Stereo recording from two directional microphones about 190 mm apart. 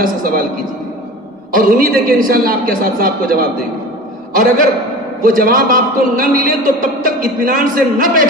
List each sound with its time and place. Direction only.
0.0 s a man's voice: 50° right (ahead or behind)
1.5 s a man's voice: 50° right (ahead or behind)
4.4 s a man's voice: 45° right (ahead or behind)